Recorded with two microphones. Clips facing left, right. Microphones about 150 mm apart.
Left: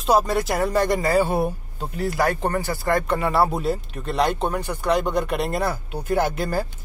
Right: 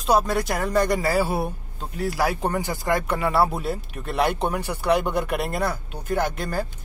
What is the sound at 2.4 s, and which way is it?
Speech, 15° right (ahead or behind).